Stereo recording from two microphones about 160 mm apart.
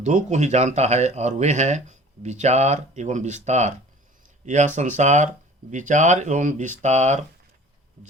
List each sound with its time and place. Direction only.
0.0 s speech: 45° right (ahead or behind)